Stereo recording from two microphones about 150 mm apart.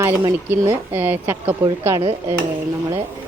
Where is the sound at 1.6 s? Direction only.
20° right (ahead or behind).